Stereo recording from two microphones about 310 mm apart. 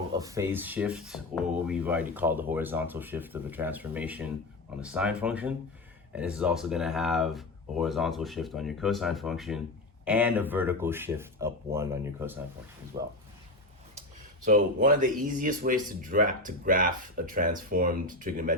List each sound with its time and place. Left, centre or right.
0.1 s speech: centre
14.4 s speech: right